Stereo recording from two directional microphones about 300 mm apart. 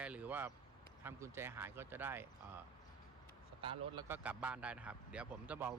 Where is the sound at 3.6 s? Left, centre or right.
Centre.